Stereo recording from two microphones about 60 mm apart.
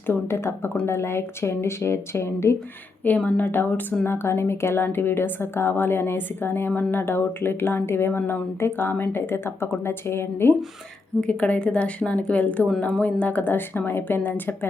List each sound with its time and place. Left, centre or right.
0.1 s speech: left
3.0 s a woman's voice: left
4.0 s speech: left
11.2 s a woman's voice: left